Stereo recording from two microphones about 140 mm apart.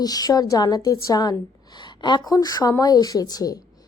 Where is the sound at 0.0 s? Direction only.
25° left (ahead or behind).